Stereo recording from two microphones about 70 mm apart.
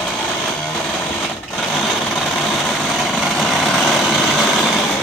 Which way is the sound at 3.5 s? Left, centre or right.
Centre.